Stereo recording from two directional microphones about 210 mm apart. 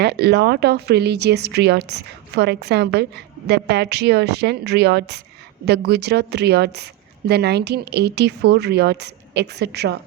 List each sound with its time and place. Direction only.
0.0 s speech: 50° right (ahead or behind)